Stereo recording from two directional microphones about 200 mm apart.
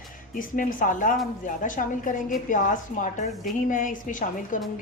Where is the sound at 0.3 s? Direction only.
40° left (ahead or behind).